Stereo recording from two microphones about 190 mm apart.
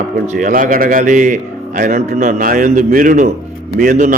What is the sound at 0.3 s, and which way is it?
A man's voice, 45° right (ahead or behind).